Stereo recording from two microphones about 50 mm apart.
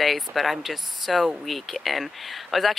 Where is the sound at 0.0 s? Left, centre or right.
Centre.